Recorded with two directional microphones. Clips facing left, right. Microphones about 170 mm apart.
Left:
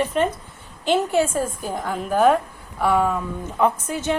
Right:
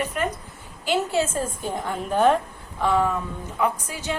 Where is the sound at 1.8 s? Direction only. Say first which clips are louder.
Left 2 dB; 5° left (ahead or behind).